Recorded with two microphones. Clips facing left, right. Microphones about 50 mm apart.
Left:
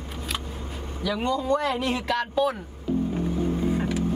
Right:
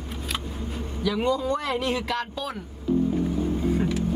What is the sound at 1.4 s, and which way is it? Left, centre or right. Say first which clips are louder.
Speech: left 2 dB; left.